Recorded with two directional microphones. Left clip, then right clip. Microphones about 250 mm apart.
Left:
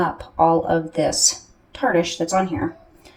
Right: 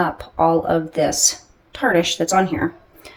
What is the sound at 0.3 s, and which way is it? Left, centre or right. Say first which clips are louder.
Speech: even; centre.